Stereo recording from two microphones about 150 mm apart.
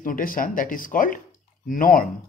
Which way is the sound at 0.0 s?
65° left (ahead or behind).